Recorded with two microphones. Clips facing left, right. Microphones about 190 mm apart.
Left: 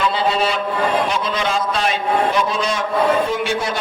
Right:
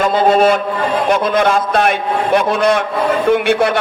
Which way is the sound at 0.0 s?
50° right (ahead or behind).